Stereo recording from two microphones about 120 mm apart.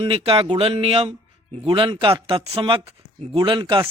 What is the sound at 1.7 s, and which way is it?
Speech, 45° right (ahead or behind).